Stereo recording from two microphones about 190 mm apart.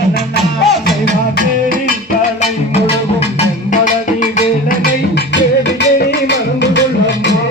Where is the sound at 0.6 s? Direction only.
Centre (ahead or behind).